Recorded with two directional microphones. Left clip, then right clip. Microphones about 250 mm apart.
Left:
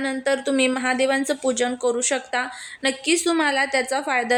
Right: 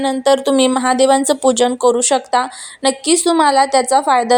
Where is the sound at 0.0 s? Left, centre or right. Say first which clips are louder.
Right 9 dB; right.